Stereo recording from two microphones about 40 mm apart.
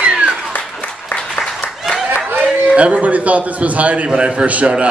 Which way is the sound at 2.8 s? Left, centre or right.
Right.